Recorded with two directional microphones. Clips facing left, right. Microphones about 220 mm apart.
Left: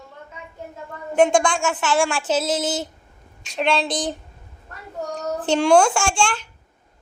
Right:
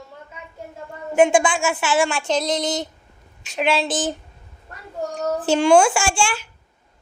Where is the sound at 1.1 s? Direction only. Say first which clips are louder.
Right 1 dB; 5° right (ahead or behind).